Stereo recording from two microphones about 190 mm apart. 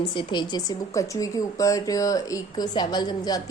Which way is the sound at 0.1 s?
25° left (ahead or behind).